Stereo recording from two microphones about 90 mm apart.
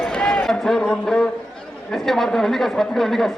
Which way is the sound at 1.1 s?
5° left (ahead or behind).